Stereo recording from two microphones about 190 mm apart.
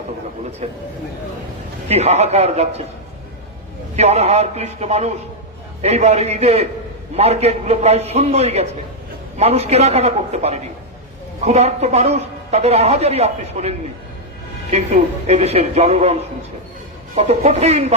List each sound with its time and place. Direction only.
0.6 s a man's voice: 35° right (ahead or behind)
1.9 s a man's voice: 35° right (ahead or behind)
3.9 s a man's voice: 35° right (ahead or behind)
17.2 s a man's voice: 35° right (ahead or behind)